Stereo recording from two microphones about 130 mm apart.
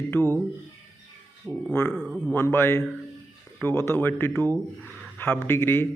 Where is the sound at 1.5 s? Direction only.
10° right (ahead or behind).